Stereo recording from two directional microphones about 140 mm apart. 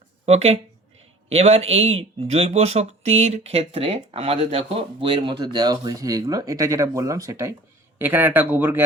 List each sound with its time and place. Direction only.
0.3 s speech: 50° right (ahead or behind); by 8.8 s 15° right (ahead or behind)